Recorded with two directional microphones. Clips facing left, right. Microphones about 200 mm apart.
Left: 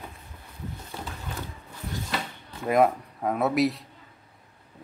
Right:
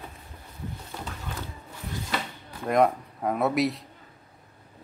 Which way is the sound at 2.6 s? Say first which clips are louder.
Left 1 dB; 5° left (ahead or behind).